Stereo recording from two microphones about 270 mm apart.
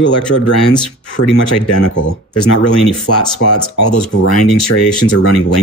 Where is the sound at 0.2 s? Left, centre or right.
Centre.